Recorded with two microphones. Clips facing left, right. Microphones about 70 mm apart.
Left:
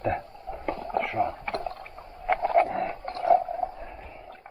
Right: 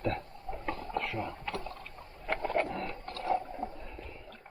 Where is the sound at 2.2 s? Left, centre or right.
Centre.